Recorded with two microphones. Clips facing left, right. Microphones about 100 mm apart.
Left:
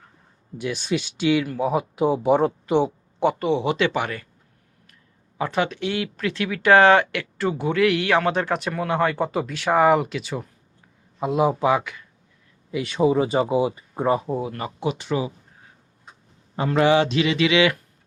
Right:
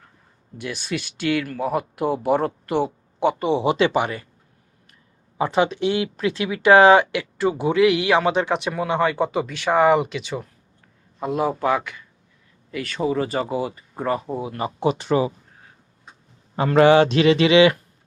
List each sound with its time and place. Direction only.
0.6 s speech: 10° left (ahead or behind)
3.2 s speech: 15° right (ahead or behind)
3.5 s speech: 25° right (ahead or behind)
5.4 s speech: 20° right (ahead or behind); by 13.1 s 10° left (ahead or behind)
13.1 s speech: 20° left (ahead or behind)
14.2 s speech: centre (ahead or behind)
14.8 s speech: 40° right (ahead or behind)
16.6 s speech: 60° right (ahead or behind); by 17.7 s 30° right (ahead or behind)